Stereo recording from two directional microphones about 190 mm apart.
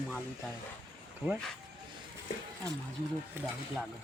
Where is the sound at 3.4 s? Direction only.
10° right (ahead or behind).